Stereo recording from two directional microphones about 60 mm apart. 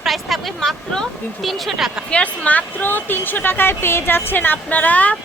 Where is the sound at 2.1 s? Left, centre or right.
Left.